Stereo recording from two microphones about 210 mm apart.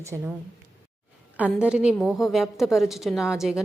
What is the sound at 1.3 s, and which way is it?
A woman's voice, 5° right (ahead or behind).